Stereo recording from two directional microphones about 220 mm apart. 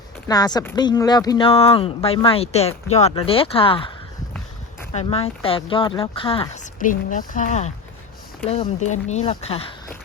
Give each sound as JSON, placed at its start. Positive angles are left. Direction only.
{"t": 0.3, "sound": "speech", "side_deg": 20}
{"t": 4.9, "sound": "speech", "side_deg": 25}